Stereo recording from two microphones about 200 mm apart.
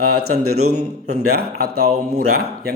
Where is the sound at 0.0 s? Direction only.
90° right.